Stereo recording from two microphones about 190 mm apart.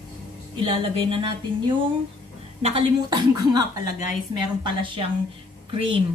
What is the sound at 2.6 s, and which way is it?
A woman's voice, 30° right (ahead or behind).